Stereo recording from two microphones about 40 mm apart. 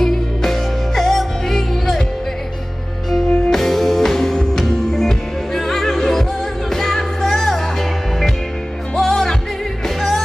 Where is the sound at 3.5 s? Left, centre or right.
Centre.